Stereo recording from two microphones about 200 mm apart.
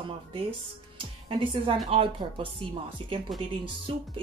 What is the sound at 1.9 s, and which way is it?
Speech, 25° right (ahead or behind).